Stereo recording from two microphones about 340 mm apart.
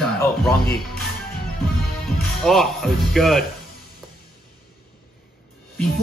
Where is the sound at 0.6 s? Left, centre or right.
Left.